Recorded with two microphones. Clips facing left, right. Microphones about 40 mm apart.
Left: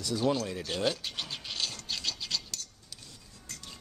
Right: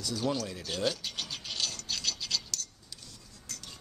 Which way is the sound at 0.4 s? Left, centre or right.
Centre.